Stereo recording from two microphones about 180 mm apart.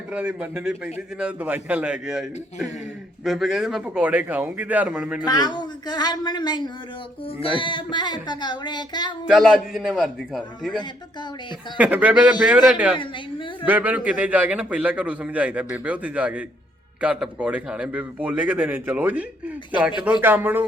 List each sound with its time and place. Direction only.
0.1 s a man's voice: 10° right (ahead or behind)
5.2 s music: 25° left (ahead or behind)
9.2 s a man's voice: centre (ahead or behind)
11.8 s a man's voice: 10° right (ahead or behind)
20.2 s a man's voice: 10° right (ahead or behind)